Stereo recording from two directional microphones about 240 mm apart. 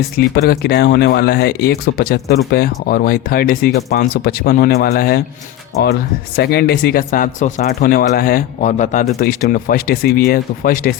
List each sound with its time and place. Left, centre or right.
0.2 s speech: left